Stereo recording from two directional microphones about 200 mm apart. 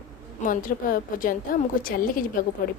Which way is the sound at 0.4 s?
45° left (ahead or behind).